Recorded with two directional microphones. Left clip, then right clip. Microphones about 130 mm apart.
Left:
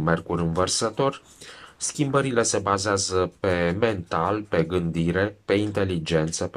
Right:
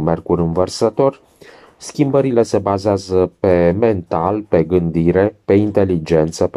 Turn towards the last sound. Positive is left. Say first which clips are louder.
# right 10 dB
turn(degrees=-45)  # may be behind; listen again after turning